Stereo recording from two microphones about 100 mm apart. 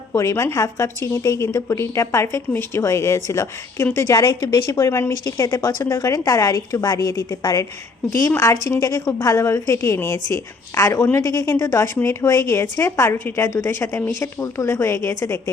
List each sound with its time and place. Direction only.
0.1 s a woman's voice: 30° left (ahead or behind)
8.8 s a woman's voice: 35° left (ahead or behind)